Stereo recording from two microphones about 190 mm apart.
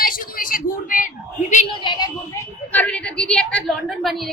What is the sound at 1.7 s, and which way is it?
Speech, 25° left (ahead or behind).